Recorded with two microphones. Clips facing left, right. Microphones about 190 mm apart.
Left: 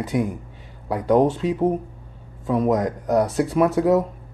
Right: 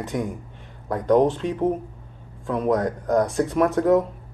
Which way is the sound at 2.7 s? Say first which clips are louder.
Right 3 dB; 15° left (ahead or behind).